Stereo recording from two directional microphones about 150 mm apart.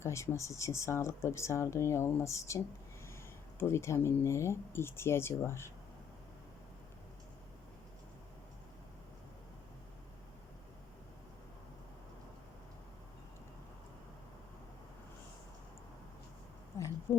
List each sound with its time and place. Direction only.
0.0 s speech: 20° left (ahead or behind)
3.6 s speech: 15° left (ahead or behind)
16.7 s a sound: 20° left (ahead or behind)